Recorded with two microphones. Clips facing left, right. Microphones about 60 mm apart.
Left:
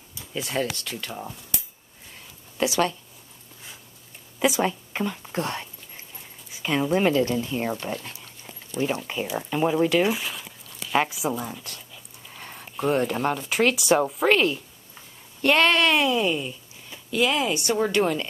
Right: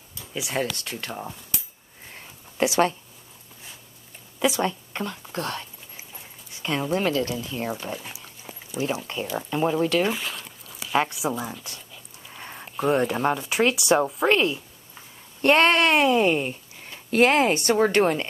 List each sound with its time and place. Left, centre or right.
0.3 s speech: centre
2.5 s speech: right
4.4 s speech: centre
5.3 s speech: left
5.9 s dog: centre
7.0 s speech: left
7.8 s a sound: centre
9.0 s a woman's voice: centre
15.4 s speech: right